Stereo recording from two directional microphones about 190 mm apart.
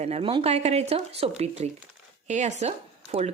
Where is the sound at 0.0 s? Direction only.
30° right (ahead or behind).